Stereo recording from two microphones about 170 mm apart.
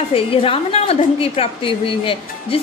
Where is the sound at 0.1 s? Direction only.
35° left (ahead or behind).